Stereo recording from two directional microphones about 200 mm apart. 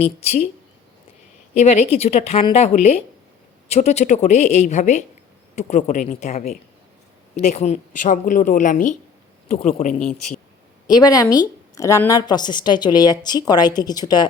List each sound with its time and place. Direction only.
0.0 s a woman's voice: 30° left (ahead or behind)
1.5 s a woman's voice: 35° left (ahead or behind)
10.8 s a woman's voice: 20° left (ahead or behind)